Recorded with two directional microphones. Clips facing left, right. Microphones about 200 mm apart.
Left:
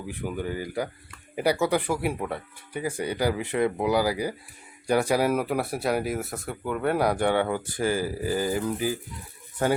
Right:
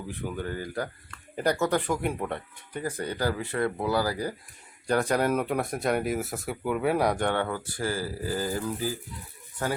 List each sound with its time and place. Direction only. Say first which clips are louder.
0.1 s speech: left 3 dB; 10° left (ahead or behind)
7.4 s speech: left 4 dB; 20° left (ahead or behind)